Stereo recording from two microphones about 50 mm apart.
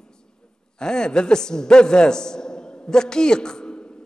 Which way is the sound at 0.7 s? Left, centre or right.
Centre.